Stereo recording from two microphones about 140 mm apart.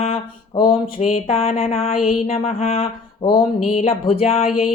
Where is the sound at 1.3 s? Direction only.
45° left (ahead or behind).